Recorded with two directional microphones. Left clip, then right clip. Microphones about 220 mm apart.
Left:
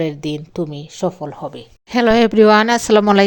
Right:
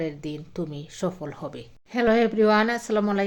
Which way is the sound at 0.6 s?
25° left (ahead or behind).